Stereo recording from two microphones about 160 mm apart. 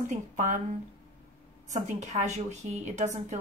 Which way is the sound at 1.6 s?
45° right (ahead or behind).